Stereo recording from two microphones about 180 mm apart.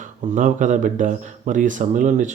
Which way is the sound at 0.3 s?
45° right (ahead or behind).